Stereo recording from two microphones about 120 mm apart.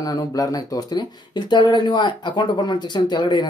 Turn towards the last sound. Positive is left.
turn(degrees=35)  # may be behind; listen again after turning